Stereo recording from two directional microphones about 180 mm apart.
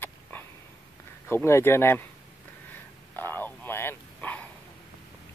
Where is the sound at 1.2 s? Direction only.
15° left (ahead or behind).